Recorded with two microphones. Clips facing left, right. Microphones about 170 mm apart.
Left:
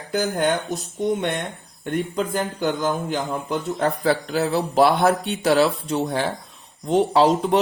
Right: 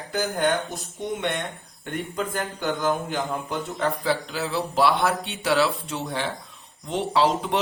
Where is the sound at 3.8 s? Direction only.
50° left (ahead or behind).